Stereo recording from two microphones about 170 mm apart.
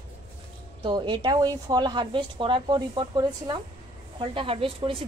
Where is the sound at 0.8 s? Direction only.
25° right (ahead or behind).